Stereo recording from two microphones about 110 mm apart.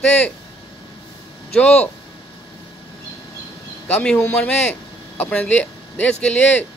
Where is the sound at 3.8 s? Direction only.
10° left (ahead or behind).